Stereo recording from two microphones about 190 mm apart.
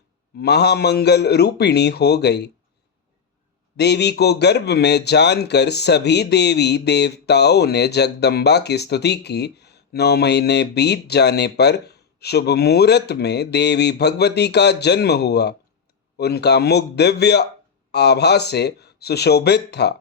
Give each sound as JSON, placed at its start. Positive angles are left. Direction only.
{"t": 0.3, "sound": "speech", "side_deg": 60}
{"t": 3.8, "sound": "speech", "side_deg": 60}